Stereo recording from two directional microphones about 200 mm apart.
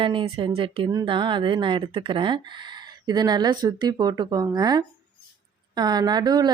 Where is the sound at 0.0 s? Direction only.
25° right (ahead or behind).